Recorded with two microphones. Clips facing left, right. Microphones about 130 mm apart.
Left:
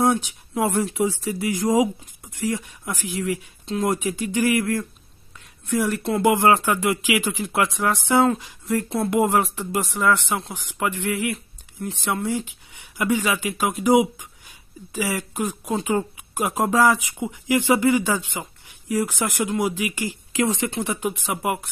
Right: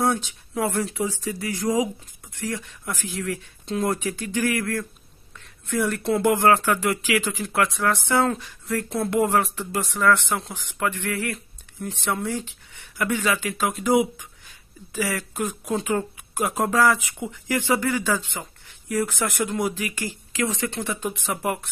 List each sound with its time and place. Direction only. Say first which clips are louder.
0.0 s speech: left 3 dB; 15° left (ahead or behind)
2.8 s speech: left 3 dB; 5° left (ahead or behind)
3.9 s speech: left 3 dB; 15° left (ahead or behind)
6.2 s speech: left 2 dB; 15° left (ahead or behind)
11.3 s speech: left 2 dB; centre (ahead or behind)
19.7 s speech: left 3 dB; 15° left (ahead or behind)